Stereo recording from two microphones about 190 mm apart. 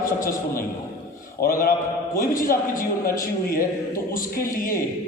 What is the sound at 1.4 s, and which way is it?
A man's voice, 50° left (ahead or behind).